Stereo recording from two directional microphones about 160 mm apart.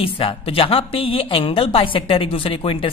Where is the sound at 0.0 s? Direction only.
35° left (ahead or behind).